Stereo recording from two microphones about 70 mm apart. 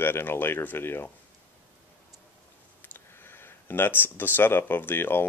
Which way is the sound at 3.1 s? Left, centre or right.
Left.